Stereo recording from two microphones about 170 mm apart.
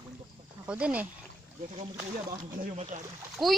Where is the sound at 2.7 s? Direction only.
40° right (ahead or behind).